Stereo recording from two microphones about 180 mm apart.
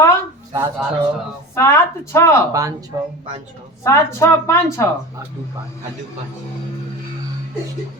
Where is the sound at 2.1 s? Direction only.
15° left (ahead or behind).